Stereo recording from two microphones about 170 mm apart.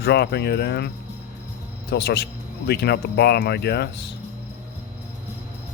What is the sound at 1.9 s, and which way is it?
Speech, 75° left (ahead or behind).